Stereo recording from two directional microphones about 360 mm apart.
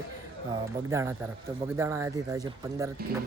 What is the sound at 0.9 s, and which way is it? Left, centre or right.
Speech, centre.